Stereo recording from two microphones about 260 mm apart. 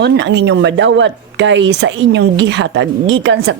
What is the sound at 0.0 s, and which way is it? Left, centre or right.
Speech, right.